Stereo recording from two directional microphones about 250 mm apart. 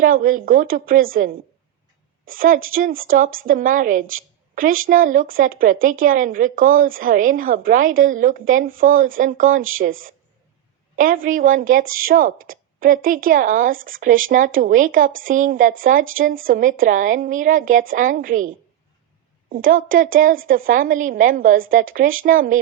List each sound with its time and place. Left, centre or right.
0.0 s speech: right
19.5 s speech: right